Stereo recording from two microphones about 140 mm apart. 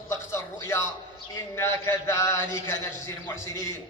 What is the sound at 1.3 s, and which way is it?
Speech, 20° left (ahead or behind).